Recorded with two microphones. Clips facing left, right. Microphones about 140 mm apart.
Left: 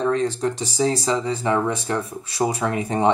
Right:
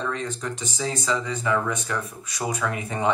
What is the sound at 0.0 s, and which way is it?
Speech, 35° left (ahead or behind).